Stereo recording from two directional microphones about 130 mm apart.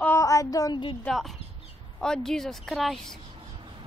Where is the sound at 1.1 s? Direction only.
Centre (ahead or behind).